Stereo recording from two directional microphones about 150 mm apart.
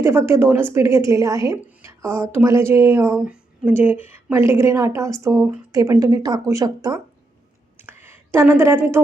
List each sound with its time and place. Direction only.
0.0 s a woman's voice: 15° right (ahead or behind)
8.0 s a woman's voice: 15° right (ahead or behind)